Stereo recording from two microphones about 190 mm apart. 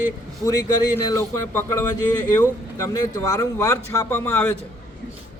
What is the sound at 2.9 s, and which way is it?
A man's voice, 20° left (ahead or behind).